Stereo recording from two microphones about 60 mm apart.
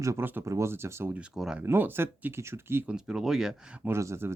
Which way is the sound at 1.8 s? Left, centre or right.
Right.